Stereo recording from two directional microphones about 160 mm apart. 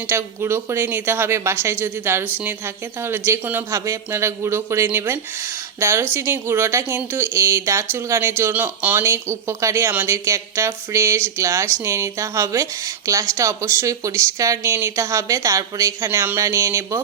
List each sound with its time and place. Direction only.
0.1 s speech: 15° right (ahead or behind)